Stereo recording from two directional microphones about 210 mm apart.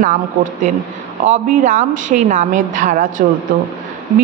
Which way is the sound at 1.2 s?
35° right (ahead or behind).